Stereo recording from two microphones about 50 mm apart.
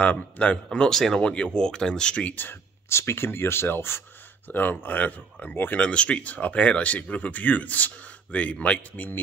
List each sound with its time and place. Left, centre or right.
0.0 s speech: left
0.7 s speech: centre
1.2 s speech: left
2.2 s speech: left
2.9 s speech: left
4.5 s speech: left
5.8 s speech: left
8.9 s speech: left